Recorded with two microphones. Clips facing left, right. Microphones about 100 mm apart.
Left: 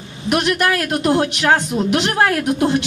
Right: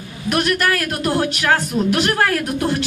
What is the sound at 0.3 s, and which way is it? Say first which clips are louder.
Speech: left 1 dB; 20° left (ahead or behind).